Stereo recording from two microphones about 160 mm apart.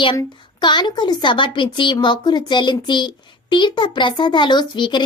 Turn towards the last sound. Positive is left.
turn(degrees=30)  # may be behind; listen again after turning